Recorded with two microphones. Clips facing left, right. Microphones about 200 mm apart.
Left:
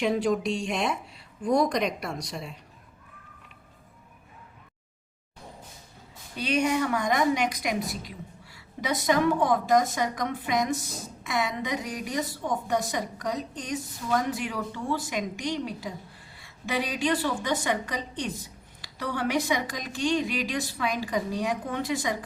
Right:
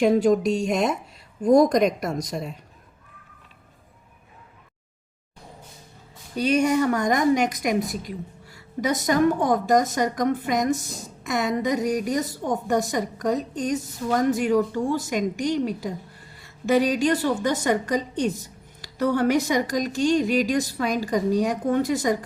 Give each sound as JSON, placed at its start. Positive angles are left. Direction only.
{"t": 0.0, "sound": "a woman's voice", "side_deg": -45}
{"t": 6.3, "sound": "a woman's voice", "side_deg": -45}